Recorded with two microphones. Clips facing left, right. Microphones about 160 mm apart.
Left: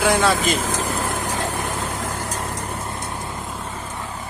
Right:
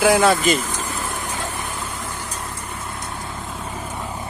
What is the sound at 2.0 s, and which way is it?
Vehicle, 85° left.